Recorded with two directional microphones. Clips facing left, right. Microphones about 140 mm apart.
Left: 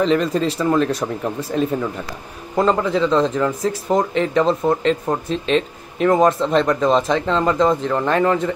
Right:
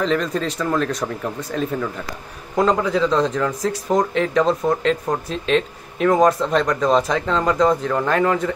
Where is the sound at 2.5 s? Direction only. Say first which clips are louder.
Left 1 dB; centre (ahead or behind).